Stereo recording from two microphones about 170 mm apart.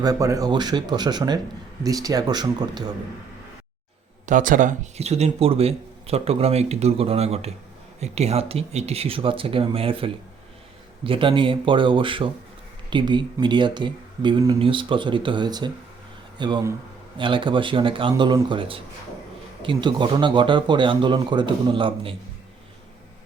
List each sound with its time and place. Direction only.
0.0 s speech: 20° right (ahead or behind)
4.3 s speech: 50° right (ahead or behind); by 22.1 s 30° right (ahead or behind)